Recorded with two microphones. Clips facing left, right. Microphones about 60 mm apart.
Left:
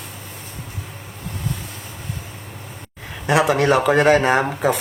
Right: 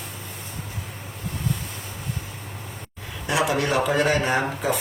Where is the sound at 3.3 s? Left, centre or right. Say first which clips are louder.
Left 6 dB; left.